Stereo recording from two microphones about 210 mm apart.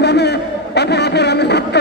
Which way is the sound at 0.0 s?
50° left (ahead or behind).